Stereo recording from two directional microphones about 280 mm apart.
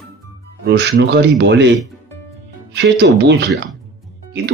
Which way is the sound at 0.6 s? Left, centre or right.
Right.